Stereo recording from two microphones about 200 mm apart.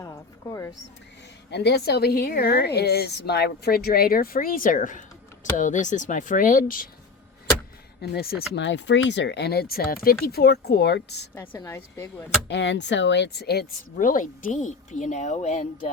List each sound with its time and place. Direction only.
0.0 s a sound: 15° left (ahead or behind)
1.5 s a woman's voice: 55° left (ahead or behind)
8.0 s a woman's voice: 50° left (ahead or behind)
11.3 s speech: 15° left (ahead or behind)
12.5 s speech: 60° left (ahead or behind); by 15.6 s 35° left (ahead or behind)